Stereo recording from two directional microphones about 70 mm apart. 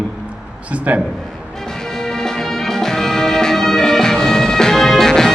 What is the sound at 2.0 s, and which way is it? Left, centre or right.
Music, centre.